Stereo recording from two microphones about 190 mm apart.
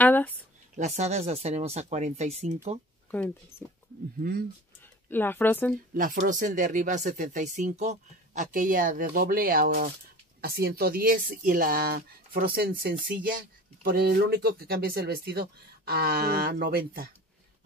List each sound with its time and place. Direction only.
0.0 s a sound: 10° left (ahead or behind)
0.7 s speech: 35° right (ahead or behind)
3.1 s speech: 10° left (ahead or behind)
4.2 s speech: 50° right (ahead or behind)
5.1 s speech: 10° left (ahead or behind)
5.9 s speech: 45° right (ahead or behind)